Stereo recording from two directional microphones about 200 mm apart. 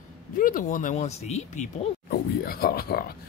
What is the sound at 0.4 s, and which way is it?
Speech, 40° left (ahead or behind).